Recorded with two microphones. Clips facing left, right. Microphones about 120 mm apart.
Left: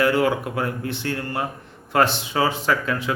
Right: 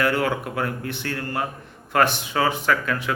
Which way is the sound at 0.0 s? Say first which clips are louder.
Left 3 dB; 25° left (ahead or behind).